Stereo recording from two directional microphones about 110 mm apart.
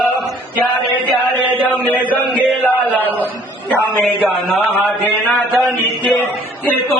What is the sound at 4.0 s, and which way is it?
Speech, 15° left (ahead or behind).